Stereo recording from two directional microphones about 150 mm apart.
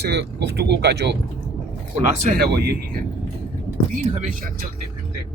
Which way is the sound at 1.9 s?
55° right (ahead or behind).